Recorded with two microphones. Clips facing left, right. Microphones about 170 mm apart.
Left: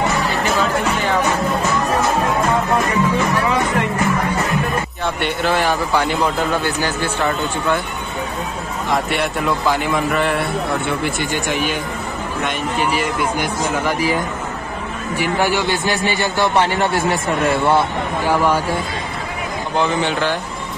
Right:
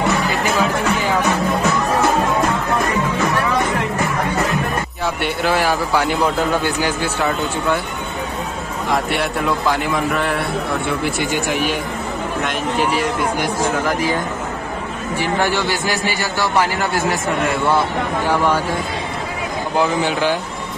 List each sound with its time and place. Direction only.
0.6 s a man's voice: 5° right (ahead or behind)
5.0 s speech: 5° right (ahead or behind)
8.9 s a man's voice: centre (ahead or behind)
15.1 s a man's voice: 15° left (ahead or behind)
18.3 s speech: 10° left (ahead or behind)
19.8 s speech: 10° right (ahead or behind)